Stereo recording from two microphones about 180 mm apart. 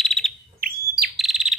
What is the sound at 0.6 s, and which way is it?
Bird, 55° right (ahead or behind).